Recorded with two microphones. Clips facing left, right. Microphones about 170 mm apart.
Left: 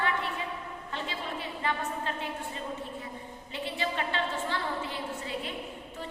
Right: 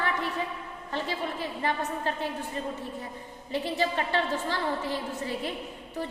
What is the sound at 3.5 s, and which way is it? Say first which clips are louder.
Speech: right 5 dB; 40° right (ahead or behind).